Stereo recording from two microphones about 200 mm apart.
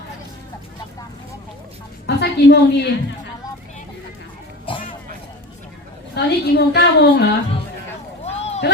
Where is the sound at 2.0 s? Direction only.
55° left (ahead or behind).